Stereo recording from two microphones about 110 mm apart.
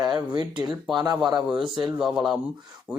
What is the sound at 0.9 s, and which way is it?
Speech, 35° right (ahead or behind).